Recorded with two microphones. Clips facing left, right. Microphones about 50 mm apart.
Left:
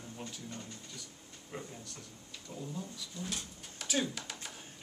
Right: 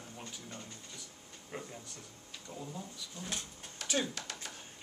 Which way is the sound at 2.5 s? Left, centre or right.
Centre.